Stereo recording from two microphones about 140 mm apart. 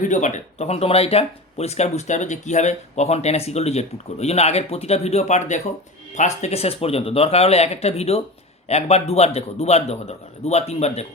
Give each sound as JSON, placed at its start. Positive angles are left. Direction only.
{"t": 0.0, "sound": "speech", "side_deg": 60}